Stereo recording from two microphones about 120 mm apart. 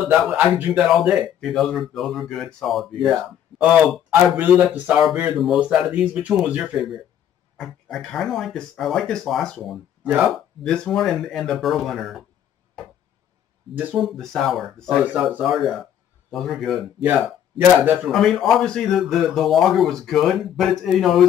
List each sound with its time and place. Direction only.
0.0 s speech: 5° right (ahead or behind)
4.1 s speech: 15° right (ahead or behind)
7.5 s speech: 5° left (ahead or behind)
13.9 s speech: centre (ahead or behind)
17.6 s speech: 15° right (ahead or behind)
18.0 s speech: centre (ahead or behind)